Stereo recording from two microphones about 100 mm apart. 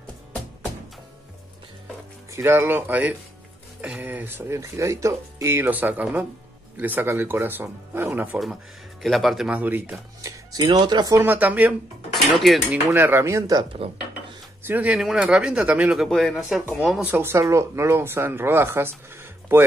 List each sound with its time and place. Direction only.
2.3 s speech: 25° right (ahead or behind)
9.0 s speech: centre (ahead or behind)
9.5 s speech: 15° right (ahead or behind)
10.2 s music: 35° right (ahead or behind)
10.6 s speech: 45° right (ahead or behind)
11.1 s speech: 20° right (ahead or behind)
12.1 s speech: centre (ahead or behind)
12.9 s speech: 25° right (ahead or behind)
13.8 s speech: 65° right (ahead or behind)
14.6 s speech: 20° right (ahead or behind)
14.9 s speech: 5° right (ahead or behind)
16.1 s speech: 5° left (ahead or behind)
17.0 s speech: 20° right (ahead or behind)